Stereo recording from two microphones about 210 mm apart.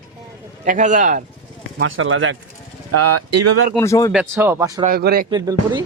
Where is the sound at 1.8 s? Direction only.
70° right (ahead or behind).